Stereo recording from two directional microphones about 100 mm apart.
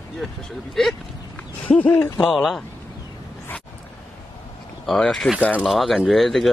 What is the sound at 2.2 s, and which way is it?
Speech, centre (ahead or behind).